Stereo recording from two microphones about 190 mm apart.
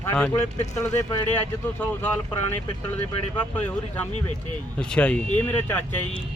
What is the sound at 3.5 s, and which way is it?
Speech, 10° left (ahead or behind).